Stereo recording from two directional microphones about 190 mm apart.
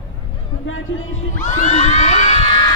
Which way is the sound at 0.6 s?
90° left.